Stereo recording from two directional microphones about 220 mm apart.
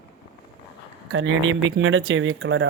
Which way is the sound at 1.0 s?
65° right (ahead or behind).